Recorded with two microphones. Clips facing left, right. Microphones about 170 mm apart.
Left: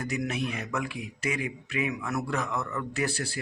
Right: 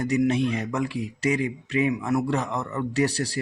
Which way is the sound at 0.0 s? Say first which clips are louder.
Right 9 dB; 30° right (ahead or behind).